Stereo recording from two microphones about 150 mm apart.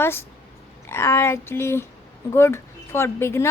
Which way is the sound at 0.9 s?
15° left (ahead or behind).